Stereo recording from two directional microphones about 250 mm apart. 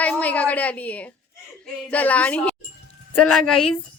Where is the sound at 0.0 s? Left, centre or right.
Centre.